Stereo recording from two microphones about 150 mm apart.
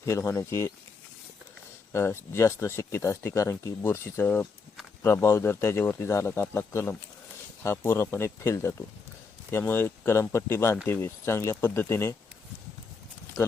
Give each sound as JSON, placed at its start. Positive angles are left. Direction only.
{"t": 0.0, "sound": "speech", "side_deg": 20}
{"t": 1.9, "sound": "speech", "side_deg": 15}